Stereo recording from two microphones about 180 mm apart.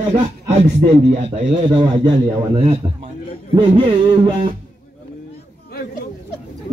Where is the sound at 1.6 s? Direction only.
25° right (ahead or behind).